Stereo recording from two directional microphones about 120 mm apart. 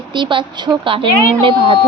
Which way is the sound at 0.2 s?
45° right (ahead or behind).